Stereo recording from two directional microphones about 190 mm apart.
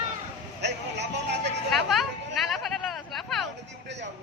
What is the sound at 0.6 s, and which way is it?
Vehicle, 65° right (ahead or behind).